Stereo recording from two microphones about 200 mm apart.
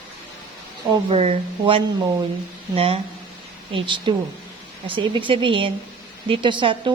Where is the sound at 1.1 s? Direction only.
30° right (ahead or behind).